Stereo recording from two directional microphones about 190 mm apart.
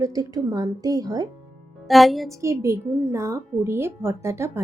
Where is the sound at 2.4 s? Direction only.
15° right (ahead or behind).